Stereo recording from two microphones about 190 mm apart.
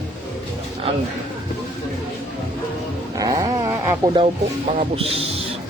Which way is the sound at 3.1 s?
20° right (ahead or behind).